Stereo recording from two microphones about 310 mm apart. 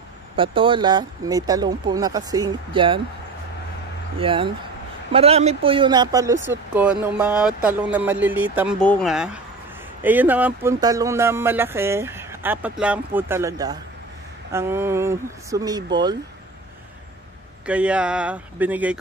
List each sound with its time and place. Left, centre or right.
0.4 s speech: centre
4.2 s speech: centre
17.6 s speech: centre